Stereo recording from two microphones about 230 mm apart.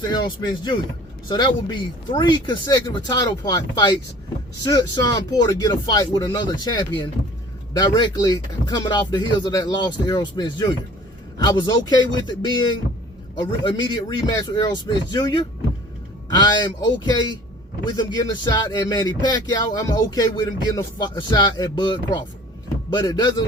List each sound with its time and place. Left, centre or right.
0.0 s speech: centre